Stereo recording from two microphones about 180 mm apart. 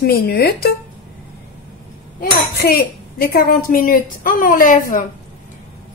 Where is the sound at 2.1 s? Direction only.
60° left (ahead or behind).